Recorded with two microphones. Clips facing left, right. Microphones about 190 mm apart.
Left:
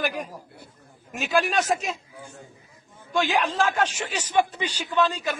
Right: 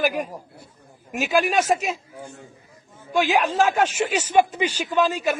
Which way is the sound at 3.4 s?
10° right (ahead or behind).